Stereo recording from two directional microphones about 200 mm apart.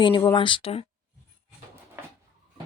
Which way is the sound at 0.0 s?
20° left (ahead or behind).